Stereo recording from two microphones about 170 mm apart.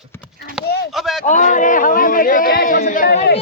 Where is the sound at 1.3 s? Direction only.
45° left (ahead or behind).